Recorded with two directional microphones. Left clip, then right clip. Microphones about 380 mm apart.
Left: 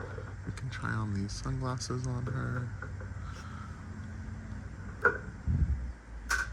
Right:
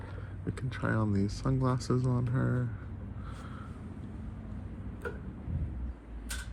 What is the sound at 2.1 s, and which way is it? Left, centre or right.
Speech, right.